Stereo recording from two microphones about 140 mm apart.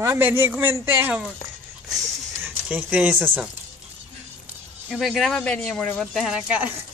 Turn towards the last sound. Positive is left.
turn(degrees=-10)  # may be behind; listen again after turning